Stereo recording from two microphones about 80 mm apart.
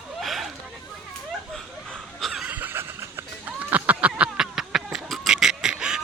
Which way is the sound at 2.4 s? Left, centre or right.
Right.